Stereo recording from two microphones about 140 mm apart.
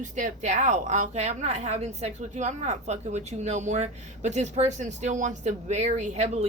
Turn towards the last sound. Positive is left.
turn(degrees=-50)  # may be behind; listen again after turning